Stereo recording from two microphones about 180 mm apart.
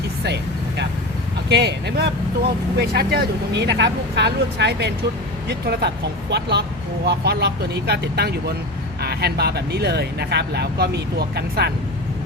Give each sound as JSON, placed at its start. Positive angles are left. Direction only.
{"t": 1.5, "sound": "speech", "side_deg": -70}